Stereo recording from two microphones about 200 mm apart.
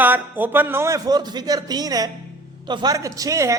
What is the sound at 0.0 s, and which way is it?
A man's voice, 10° right (ahead or behind).